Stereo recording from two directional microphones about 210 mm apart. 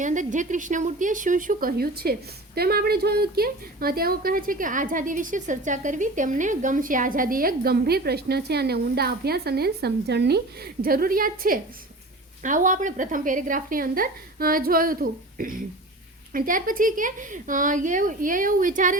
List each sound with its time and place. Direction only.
0.0 s a woman's voice: 35° right (ahead or behind)